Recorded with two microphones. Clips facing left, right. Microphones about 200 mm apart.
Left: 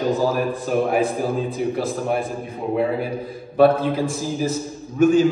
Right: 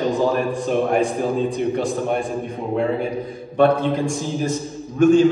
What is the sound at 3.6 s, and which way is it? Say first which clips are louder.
A man's voice: left 1 dB; 5° left (ahead or behind).